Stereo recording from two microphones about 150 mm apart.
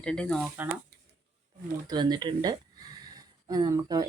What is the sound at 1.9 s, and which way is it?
A woman's voice, 30° right (ahead or behind).